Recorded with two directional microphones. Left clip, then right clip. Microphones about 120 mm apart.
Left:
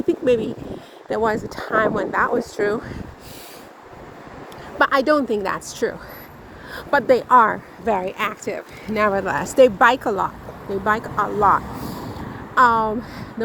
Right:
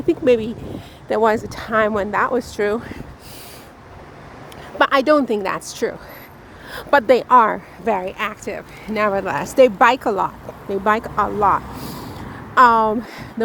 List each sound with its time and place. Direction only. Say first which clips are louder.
0.1 s speech: right 3 dB; 30° right (ahead or behind)
4.8 s speech: right 2 dB; 30° right (ahead or behind)
6.7 s speech: right 3 dB; 35° right (ahead or behind)
7.9 s speech: even; 5° right (ahead or behind); by 11.6 s 30° right (ahead or behind)
11.8 s vehicle: left 1 dB; 75° right (ahead or behind)
12.5 s speech: right 3 dB; 45° right (ahead or behind)